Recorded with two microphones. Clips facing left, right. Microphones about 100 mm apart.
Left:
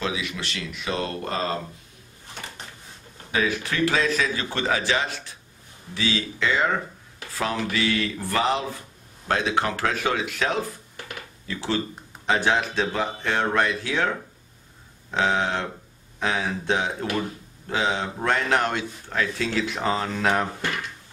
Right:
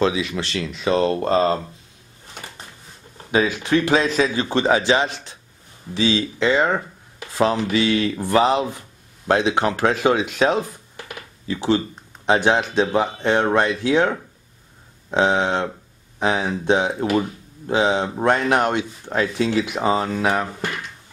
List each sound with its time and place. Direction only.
0.0 s speech: 30° right (ahead or behind)
3.3 s speech: 20° right (ahead or behind)
11.1 s computer keyboard: 20° right (ahead or behind)
12.3 s speech: 20° right (ahead or behind)